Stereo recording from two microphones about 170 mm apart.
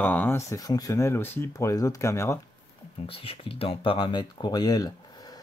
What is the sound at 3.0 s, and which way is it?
Speech, 35° left (ahead or behind).